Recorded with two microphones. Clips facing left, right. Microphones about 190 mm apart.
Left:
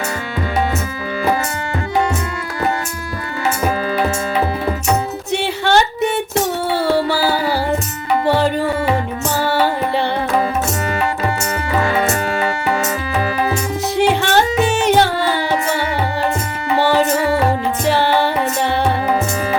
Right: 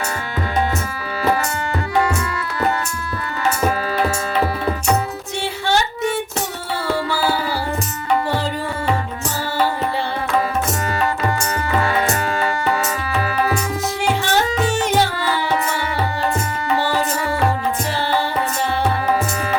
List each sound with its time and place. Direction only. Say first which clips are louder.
5.4 s music: left 4 dB; 65° left (ahead or behind)
14.2 s music: left 4 dB; 65° left (ahead or behind)
16.7 s music: left 6 dB; 25° left (ahead or behind)
17.9 s music: left 6 dB; 65° left (ahead or behind)